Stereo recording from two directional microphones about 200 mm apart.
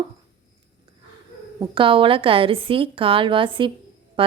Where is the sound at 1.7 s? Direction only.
25° right (ahead or behind).